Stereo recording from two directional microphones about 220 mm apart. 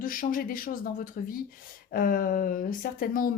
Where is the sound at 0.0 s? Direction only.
40° left (ahead or behind).